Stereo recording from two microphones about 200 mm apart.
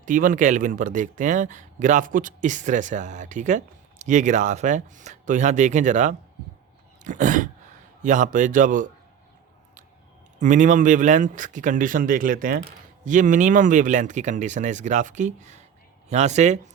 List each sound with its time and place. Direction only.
0.0 s speech: 40° right (ahead or behind)
7.0 s a sound: 40° right (ahead or behind)
8.0 s speech: 40° right (ahead or behind)
10.4 s speech: 40° right (ahead or behind)